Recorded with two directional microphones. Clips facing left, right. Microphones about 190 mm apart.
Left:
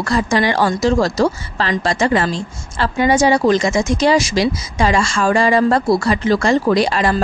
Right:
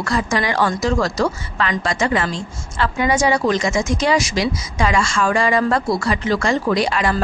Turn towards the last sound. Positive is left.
turn(degrees=35)  # may be behind; listen again after turning